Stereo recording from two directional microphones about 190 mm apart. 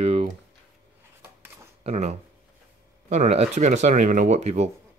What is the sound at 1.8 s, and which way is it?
Speech, 35° right (ahead or behind).